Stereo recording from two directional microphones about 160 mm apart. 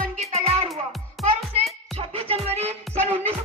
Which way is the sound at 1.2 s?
Centre (ahead or behind).